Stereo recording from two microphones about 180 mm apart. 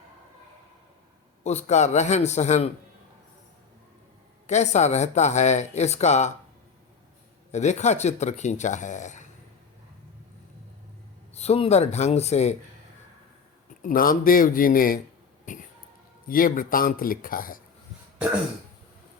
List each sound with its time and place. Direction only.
1.5 s speech: 40° left (ahead or behind)
4.4 s speech: 40° left (ahead or behind)
7.5 s speech: 40° left (ahead or behind)
11.3 s speech: 35° left (ahead or behind)
13.8 s speech: 50° left (ahead or behind)
16.3 s speech: 50° left (ahead or behind)